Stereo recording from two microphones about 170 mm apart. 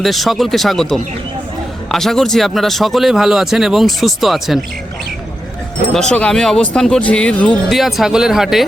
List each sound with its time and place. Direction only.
0.0 s speech: centre (ahead or behind)
5.9 s speech: 5° left (ahead or behind)